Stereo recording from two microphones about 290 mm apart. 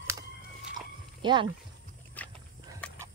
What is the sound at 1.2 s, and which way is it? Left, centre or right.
Speech, centre.